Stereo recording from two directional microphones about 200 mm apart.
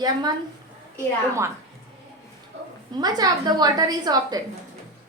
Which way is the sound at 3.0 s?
20° right (ahead or behind).